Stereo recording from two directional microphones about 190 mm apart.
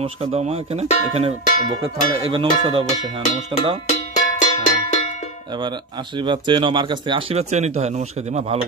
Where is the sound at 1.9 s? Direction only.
25° right (ahead or behind).